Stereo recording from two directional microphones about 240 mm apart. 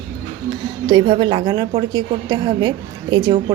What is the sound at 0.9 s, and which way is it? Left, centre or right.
A woman's voice, centre.